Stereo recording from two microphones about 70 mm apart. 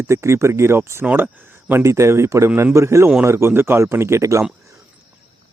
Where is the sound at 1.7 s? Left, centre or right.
Right.